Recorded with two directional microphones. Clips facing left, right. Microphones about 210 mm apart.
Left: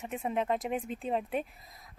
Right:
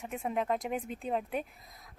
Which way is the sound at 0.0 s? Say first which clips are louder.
Left 1 dB; centre (ahead or behind).